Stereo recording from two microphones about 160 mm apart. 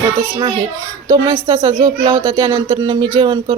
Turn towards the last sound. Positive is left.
turn(degrees=-30)  # may be behind; listen again after turning